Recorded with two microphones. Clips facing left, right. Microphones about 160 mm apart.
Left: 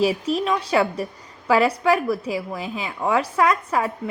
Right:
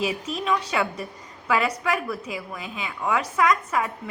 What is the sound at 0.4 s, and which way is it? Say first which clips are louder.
A woman's voice: left 2 dB; 30° left (ahead or behind).